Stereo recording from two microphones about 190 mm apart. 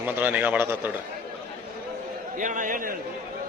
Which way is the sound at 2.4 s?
45° right (ahead or behind).